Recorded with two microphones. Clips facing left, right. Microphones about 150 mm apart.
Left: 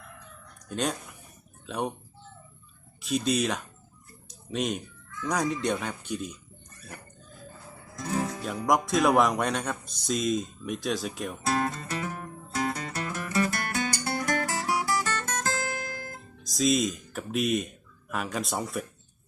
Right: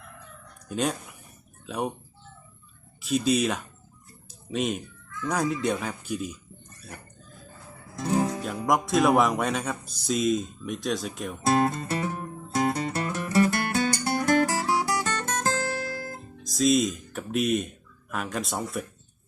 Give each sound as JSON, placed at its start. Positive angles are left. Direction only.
{"t": 0.7, "sound": "speech", "side_deg": -5}
{"t": 3.0, "sound": "speech", "side_deg": 0}
{"t": 4.3, "sound": "a sound", "side_deg": 0}
{"t": 5.2, "sound": "speech", "side_deg": 0}
{"t": 7.9, "sound": "music", "side_deg": -30}
{"t": 8.6, "sound": "speech", "side_deg": 0}
{"t": 11.4, "sound": "speech", "side_deg": -35}
{"t": 12.1, "sound": "music", "side_deg": -25}
{"t": 14.4, "sound": "music", "side_deg": -35}
{"t": 15.0, "sound": "guitar", "side_deg": -25}
{"t": 16.4, "sound": "speech", "side_deg": 0}